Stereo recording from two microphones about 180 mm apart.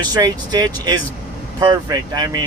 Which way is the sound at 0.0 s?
25° right (ahead or behind).